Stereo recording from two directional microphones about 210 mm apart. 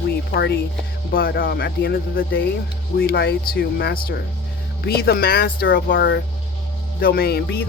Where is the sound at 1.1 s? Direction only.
45° left (ahead or behind).